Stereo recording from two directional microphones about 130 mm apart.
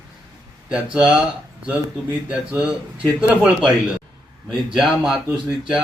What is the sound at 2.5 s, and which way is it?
Speech, 5° right (ahead or behind).